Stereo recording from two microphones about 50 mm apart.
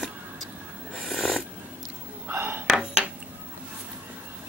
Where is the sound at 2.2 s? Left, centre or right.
Right.